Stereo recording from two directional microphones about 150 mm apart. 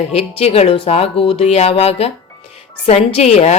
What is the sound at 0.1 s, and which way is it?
Speech, 45° left (ahead or behind).